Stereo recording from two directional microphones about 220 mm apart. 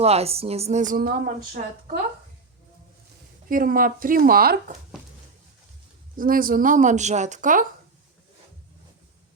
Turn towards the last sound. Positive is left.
turn(degrees=-35)  # may be behind; listen again after turning